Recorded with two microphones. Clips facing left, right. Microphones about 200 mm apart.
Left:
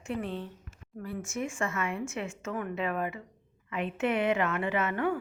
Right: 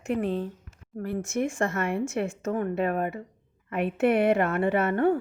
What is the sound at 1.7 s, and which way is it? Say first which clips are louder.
Speech: right 6 dB; 65° right (ahead or behind).